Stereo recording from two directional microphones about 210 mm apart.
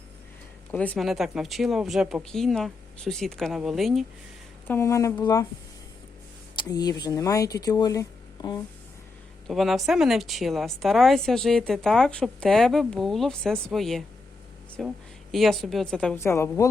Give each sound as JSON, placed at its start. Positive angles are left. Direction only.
{"t": 0.7, "sound": "a woman's voice", "side_deg": 5}
{"t": 4.7, "sound": "speech", "side_deg": 15}
{"t": 6.6, "sound": "speech", "side_deg": 20}
{"t": 9.5, "sound": "a woman's voice", "side_deg": 0}